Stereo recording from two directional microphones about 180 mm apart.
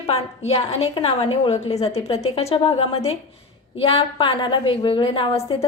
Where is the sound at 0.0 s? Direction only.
35° left (ahead or behind).